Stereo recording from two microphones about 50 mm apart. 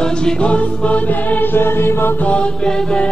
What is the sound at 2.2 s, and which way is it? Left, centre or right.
Music, left.